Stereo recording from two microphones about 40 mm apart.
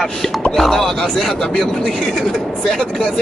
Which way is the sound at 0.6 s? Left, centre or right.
Centre.